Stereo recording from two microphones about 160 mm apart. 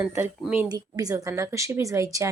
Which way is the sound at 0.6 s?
25° right (ahead or behind).